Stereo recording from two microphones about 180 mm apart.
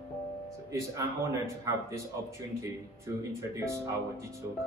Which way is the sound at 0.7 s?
20° right (ahead or behind).